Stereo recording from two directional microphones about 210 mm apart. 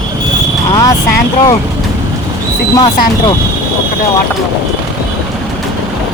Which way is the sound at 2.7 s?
20° left (ahead or behind).